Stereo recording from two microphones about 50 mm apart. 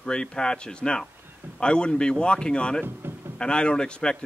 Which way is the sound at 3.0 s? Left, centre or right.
Right.